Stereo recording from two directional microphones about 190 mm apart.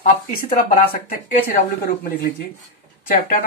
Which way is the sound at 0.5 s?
45° left (ahead or behind).